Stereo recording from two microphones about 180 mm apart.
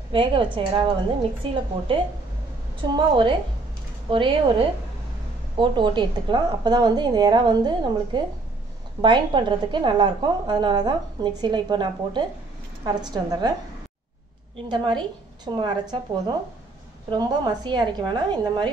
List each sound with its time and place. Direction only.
0.1 s a woman's voice: 30° right (ahead or behind)
2.9 s a woman's voice: 25° right (ahead or behind)
14.7 s a woman's voice: 25° right (ahead or behind)